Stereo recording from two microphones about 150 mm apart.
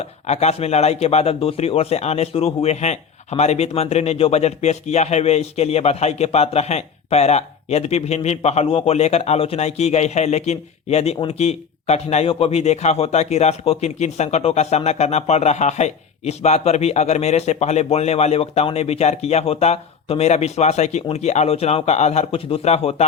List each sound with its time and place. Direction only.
0.0 s speech: 45° left (ahead or behind)